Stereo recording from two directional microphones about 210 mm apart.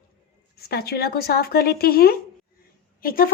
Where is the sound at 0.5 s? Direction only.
50° left (ahead or behind).